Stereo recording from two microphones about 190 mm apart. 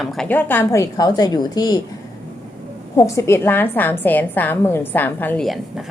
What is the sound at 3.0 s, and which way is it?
A woman's voice, 15° left (ahead or behind).